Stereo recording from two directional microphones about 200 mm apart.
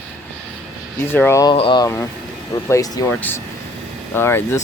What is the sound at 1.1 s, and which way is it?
Speech, 10° left (ahead or behind).